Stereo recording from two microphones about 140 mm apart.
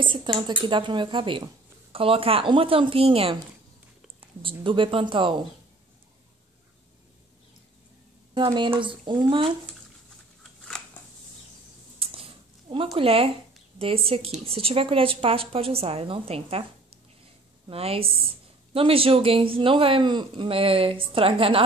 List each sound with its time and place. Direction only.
0.0 s a woman's voice: 35° right (ahead or behind)
8.5 s a woman's voice: 35° right (ahead or behind)
12.0 s a sound: 40° right (ahead or behind)
12.9 s a woman's voice: 40° right (ahead or behind)
17.6 s a woman's voice: 45° right (ahead or behind)